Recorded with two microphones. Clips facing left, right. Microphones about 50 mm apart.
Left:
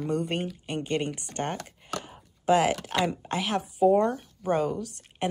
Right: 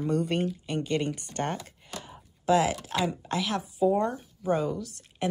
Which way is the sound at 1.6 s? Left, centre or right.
Left.